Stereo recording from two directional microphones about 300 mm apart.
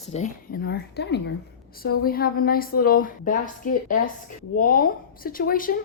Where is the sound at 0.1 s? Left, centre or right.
Left.